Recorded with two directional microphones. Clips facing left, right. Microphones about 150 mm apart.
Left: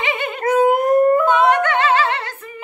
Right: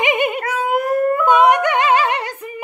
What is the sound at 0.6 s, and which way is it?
Dog, 45° left (ahead or behind).